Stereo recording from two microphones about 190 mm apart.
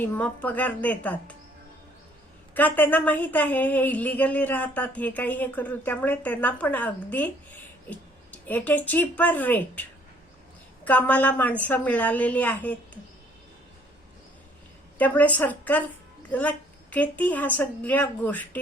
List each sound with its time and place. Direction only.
0.0 s a woman's voice: 10° left (ahead or behind)
2.6 s a woman's voice: 10° left (ahead or behind)
10.8 s a woman's voice: 10° left (ahead or behind)
14.9 s a woman's voice: 10° left (ahead or behind)